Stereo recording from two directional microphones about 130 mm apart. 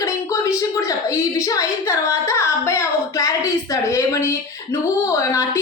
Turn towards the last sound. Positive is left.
turn(degrees=25)  # may be behind; listen again after turning